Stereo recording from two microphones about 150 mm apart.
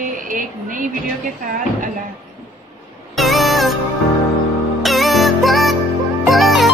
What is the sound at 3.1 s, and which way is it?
Music, centre (ahead or behind).